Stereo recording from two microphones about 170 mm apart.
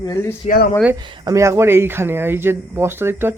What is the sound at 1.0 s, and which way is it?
Speech, 25° right (ahead or behind).